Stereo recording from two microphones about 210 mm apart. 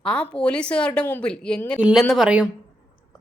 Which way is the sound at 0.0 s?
5° left (ahead or behind).